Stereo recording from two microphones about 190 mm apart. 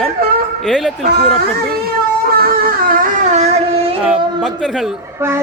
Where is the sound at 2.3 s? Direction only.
50° right (ahead or behind).